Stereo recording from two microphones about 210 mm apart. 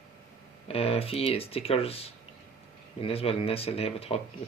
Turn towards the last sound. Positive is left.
turn(degrees=30)  # may be behind; listen again after turning